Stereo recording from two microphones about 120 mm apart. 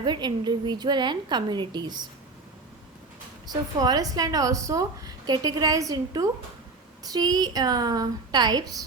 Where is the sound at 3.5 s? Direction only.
35° right (ahead or behind).